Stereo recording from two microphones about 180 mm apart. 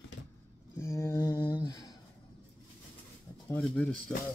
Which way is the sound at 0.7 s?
15° left (ahead or behind).